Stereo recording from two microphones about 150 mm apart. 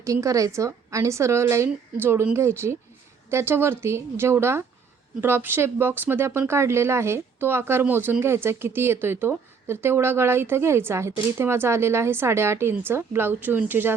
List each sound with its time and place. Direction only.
0.0 s a woman's voice: 20° right (ahead or behind)